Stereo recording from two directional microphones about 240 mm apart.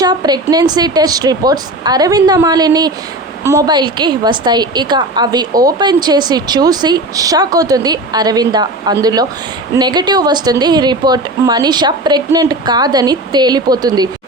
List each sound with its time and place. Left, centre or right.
0.0 s a woman's voice: centre